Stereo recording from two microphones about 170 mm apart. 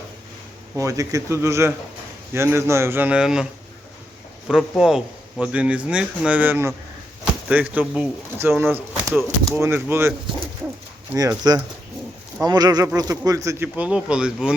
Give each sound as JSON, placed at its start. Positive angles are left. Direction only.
{"t": 0.8, "sound": "speech", "side_deg": -20}
{"t": 4.4, "sound": "speech", "side_deg": 0}
{"t": 12.4, "sound": "speech", "side_deg": -20}